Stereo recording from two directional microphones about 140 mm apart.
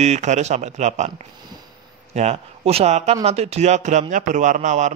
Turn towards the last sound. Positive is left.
turn(degrees=-60)  # may be behind; listen again after turning